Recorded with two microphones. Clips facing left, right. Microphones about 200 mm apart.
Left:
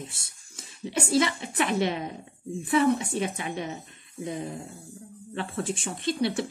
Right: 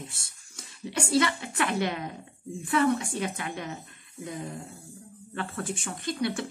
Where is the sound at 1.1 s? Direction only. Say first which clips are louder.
Left 1 dB; 20° left (ahead or behind).